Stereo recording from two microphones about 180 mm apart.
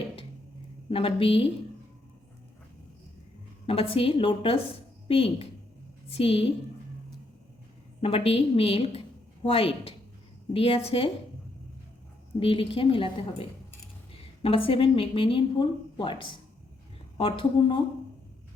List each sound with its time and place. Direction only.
0.9 s a woman's voice: 30° left (ahead or behind)
3.7 s a woman's voice: 30° left (ahead or behind)
8.0 s a woman's voice: 30° left (ahead or behind)
12.4 s a woman's voice: 30° left (ahead or behind)